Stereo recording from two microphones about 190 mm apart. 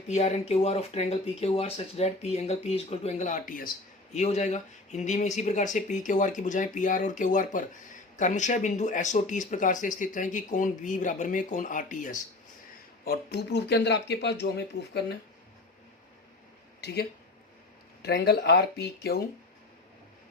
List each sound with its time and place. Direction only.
0.1 s speech: 35° left (ahead or behind)
13.1 s speech: 55° left (ahead or behind)
16.8 s speech: 60° left (ahead or behind)